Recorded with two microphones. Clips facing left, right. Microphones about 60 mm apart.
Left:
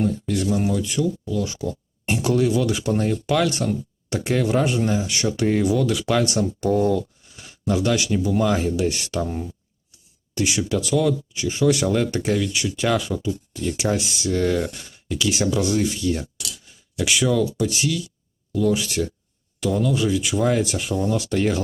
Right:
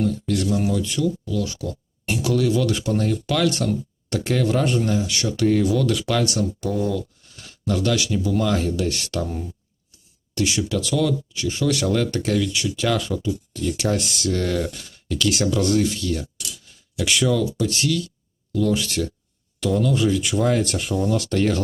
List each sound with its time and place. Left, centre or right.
0.0 s speech: centre
0.5 s speech: centre
4.9 s speech: left
5.8 s speech: centre
6.6 s speech: left
7.3 s a sound: centre
7.9 s speech: left; by 15.9 s centre
15.9 s speech: centre
16.6 s a sound: centre
17.6 s speech: centre